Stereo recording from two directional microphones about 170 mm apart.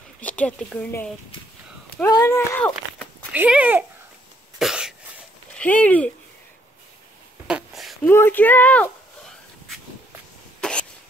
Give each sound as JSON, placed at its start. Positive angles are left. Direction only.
{"t": 0.2, "sound": "speech", "side_deg": 5}
{"t": 2.0, "sound": "speech", "side_deg": 20}
{"t": 3.3, "sound": "speech", "side_deg": -10}
{"t": 4.6, "sound": "cough", "side_deg": 0}
{"t": 5.6, "sound": "speech", "side_deg": 10}
{"t": 7.4, "sound": "a sound", "side_deg": -5}
{"t": 8.0, "sound": "a sound", "side_deg": 15}
{"t": 10.6, "sound": "cough", "side_deg": 5}